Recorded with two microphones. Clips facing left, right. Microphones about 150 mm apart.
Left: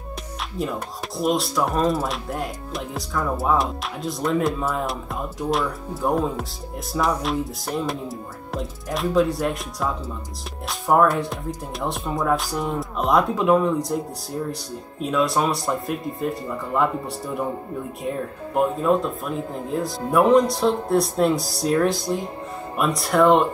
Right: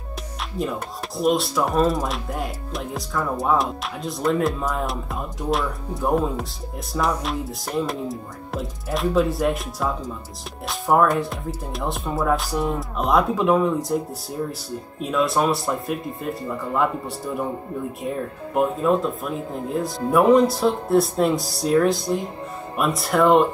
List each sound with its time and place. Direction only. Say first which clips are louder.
0.6 s speech: right 1 dB; centre (ahead or behind)
18.0 s speech: even; centre (ahead or behind)